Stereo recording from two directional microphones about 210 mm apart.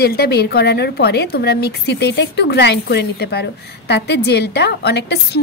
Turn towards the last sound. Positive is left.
turn(degrees=50)  # may be behind; listen again after turning